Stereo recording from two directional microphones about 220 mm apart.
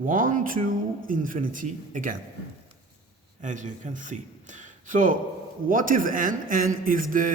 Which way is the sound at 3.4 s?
35° right (ahead or behind).